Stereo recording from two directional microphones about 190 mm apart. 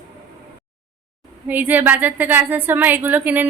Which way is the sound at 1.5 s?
10° right (ahead or behind).